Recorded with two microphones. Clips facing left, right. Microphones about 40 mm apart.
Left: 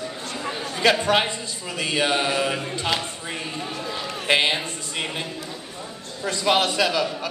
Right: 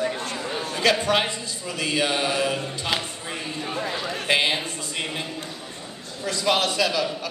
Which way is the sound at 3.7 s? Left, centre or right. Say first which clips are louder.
Right 2 dB; right.